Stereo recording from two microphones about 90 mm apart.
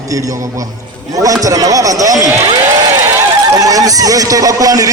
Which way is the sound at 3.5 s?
40° right (ahead or behind).